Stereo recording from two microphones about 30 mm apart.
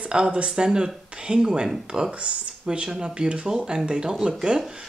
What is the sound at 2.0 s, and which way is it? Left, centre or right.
Speech, right.